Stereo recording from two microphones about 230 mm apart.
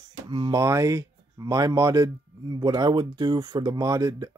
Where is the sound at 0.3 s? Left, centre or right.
Centre.